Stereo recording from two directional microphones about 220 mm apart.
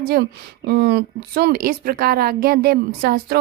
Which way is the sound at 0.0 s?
45° right (ahead or behind).